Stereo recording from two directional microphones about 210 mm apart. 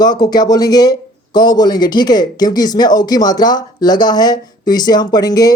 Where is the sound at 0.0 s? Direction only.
20° left (ahead or behind).